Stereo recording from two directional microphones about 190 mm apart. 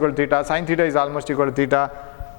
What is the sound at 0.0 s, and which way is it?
A man's voice, 15° left (ahead or behind).